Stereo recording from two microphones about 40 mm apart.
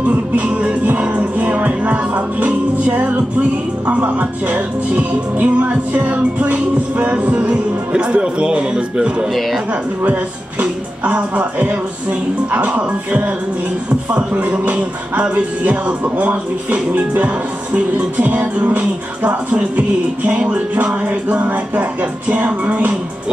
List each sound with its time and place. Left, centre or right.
0.5 s music: right
7.9 s speech: right
10.6 s music: right
13.8 s speech: right
14.5 s music: right
21.3 s speech: right
22.7 s music: right